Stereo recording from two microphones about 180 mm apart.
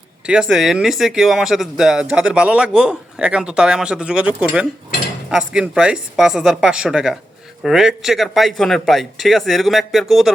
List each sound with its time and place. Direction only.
0.3 s speech: 5° right (ahead or behind)